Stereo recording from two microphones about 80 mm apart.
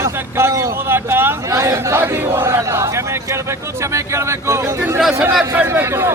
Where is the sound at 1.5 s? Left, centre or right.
Right.